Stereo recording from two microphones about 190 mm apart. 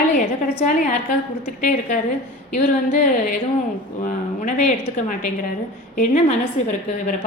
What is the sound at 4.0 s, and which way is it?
Speech, 45° left (ahead or behind).